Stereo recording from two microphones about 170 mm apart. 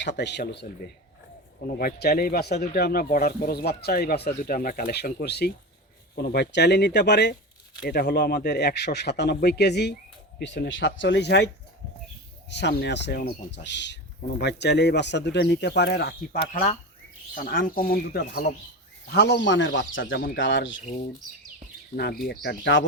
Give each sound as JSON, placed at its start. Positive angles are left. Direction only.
{"t": 0.2, "sound": "a man's voice", "side_deg": 90}
{"t": 1.6, "sound": "a man's voice", "side_deg": 65}
{"t": 7.9, "sound": "speech", "side_deg": 70}
{"t": 12.5, "sound": "a man's voice", "side_deg": 90}
{"t": 16.5, "sound": "speech", "side_deg": 45}
{"t": 19.1, "sound": "speech", "side_deg": 80}
{"t": 21.9, "sound": "speech", "side_deg": 75}
{"t": 22.4, "sound": "speech", "side_deg": 90}